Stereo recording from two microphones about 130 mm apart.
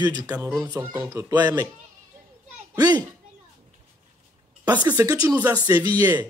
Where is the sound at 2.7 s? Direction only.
30° right (ahead or behind).